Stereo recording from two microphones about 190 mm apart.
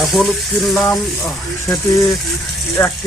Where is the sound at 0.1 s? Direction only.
Centre (ahead or behind).